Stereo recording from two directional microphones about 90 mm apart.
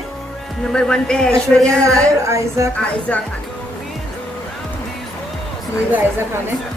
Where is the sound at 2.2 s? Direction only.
35° right (ahead or behind).